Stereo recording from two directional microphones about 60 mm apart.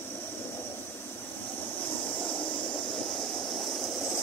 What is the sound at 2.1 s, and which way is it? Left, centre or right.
Vehicle, left.